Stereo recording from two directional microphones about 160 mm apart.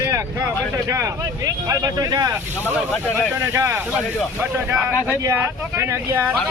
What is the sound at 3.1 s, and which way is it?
Speech, 15° right (ahead or behind).